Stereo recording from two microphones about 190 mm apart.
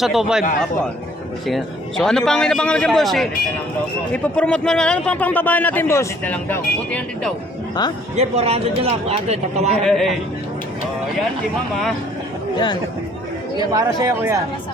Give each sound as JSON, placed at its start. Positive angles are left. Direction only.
{"t": 0.0, "sound": "a man's voice", "side_deg": 0}
{"t": 1.5, "sound": "a man's voice", "side_deg": 0}
{"t": 8.1, "sound": "speech", "side_deg": -35}
{"t": 9.8, "sound": "a man's voice", "side_deg": 0}
{"t": 13.6, "sound": "speech", "side_deg": -20}